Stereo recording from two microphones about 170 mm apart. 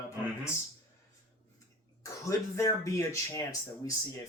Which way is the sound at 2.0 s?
20° left (ahead or behind).